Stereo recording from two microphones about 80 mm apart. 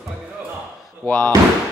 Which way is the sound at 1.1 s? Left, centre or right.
Centre.